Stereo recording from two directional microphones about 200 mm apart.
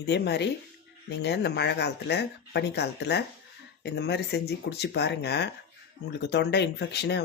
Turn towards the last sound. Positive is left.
turn(degrees=60)  # may be behind; listen again after turning